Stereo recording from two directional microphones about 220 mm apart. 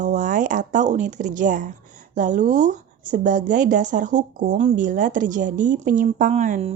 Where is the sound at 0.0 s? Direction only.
35° right (ahead or behind).